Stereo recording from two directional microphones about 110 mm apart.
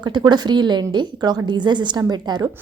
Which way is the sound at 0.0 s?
40° right (ahead or behind).